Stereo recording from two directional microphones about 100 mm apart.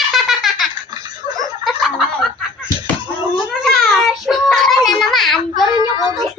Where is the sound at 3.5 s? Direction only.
5° left (ahead or behind).